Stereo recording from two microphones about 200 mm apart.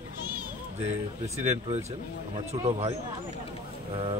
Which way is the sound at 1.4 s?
35° right (ahead or behind).